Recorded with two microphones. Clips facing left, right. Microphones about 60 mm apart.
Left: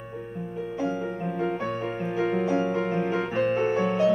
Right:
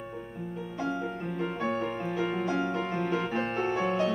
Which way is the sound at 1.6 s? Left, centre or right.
Centre.